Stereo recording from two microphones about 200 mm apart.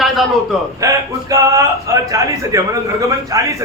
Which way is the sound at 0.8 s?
15° right (ahead or behind).